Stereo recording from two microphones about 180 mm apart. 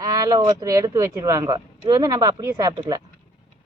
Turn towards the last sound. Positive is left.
turn(degrees=-20)  # may be behind; listen again after turning